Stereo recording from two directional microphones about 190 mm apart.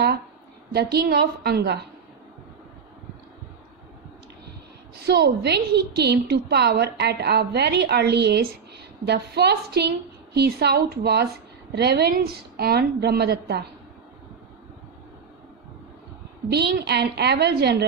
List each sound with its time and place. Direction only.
0.7 s a woman's voice: 55° right (ahead or behind)
5.0 s a woman's voice: 60° right (ahead or behind)
16.5 s a woman's voice: 60° right (ahead or behind)